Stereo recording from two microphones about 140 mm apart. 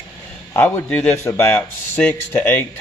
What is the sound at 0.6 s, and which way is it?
A man's voice, 15° left (ahead or behind).